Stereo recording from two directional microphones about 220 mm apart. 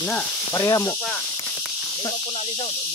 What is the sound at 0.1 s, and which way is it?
Speech, 15° left (ahead or behind).